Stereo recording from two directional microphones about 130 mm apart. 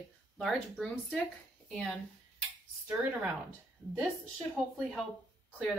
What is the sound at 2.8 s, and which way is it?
Speech, 10° right (ahead or behind).